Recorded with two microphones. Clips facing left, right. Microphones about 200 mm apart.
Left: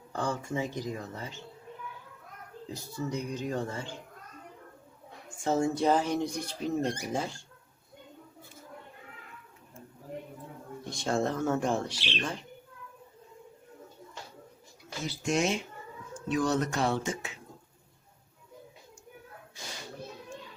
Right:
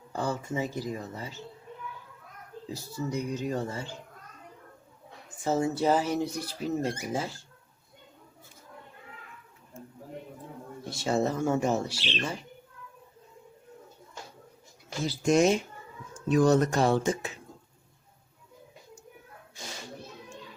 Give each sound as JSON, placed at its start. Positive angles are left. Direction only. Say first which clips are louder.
{"t": 0.1, "sound": "speech", "louder": "right 1 dB", "side_deg": -5}
{"t": 2.6, "sound": "speech", "louder": "right 1 dB", "side_deg": -10}
{"t": 5.4, "sound": "speech", "louder": "even", "side_deg": -5}
{"t": 10.8, "sound": "speech", "louder": "right 2 dB", "side_deg": -5}
{"t": 11.9, "sound": "speech", "louder": "right 2 dB", "side_deg": 15}
{"t": 15.0, "sound": "speech", "louder": "right 6 dB", "side_deg": -40}